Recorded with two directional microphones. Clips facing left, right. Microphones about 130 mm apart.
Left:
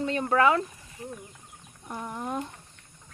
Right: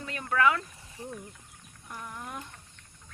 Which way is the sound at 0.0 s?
30° left (ahead or behind).